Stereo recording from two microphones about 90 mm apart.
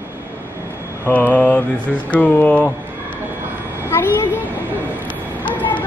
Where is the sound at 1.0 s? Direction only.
20° left (ahead or behind).